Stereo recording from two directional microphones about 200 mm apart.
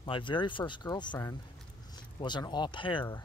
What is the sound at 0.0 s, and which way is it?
Speech, 25° left (ahead or behind).